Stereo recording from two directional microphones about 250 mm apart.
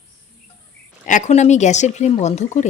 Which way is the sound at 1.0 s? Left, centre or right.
Left.